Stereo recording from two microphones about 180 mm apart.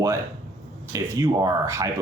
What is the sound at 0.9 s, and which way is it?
Speech, 15° right (ahead or behind).